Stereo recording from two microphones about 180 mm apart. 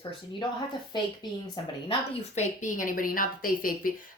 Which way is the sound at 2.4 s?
45° left (ahead or behind).